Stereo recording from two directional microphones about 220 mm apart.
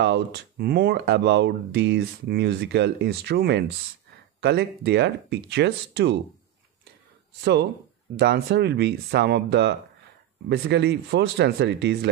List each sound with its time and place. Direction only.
0.0 s speech: 50° right (ahead or behind)
8.2 s speech: 50° right (ahead or behind)